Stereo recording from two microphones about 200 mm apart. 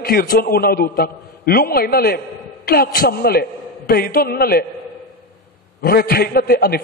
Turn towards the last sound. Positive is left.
turn(degrees=50)  # may be behind; listen again after turning